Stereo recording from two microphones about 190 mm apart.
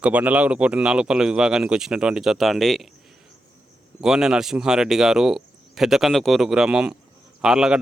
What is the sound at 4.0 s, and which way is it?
A man's voice, centre (ahead or behind).